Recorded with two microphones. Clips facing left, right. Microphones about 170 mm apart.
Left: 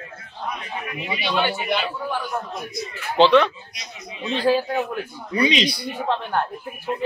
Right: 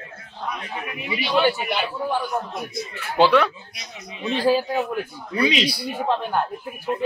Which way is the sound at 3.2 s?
10° right (ahead or behind).